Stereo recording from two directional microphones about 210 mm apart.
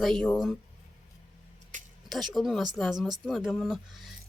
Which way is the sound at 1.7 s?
35° right (ahead or behind).